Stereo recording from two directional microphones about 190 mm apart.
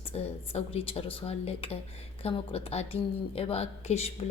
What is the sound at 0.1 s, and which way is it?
A woman's voice, 30° left (ahead or behind).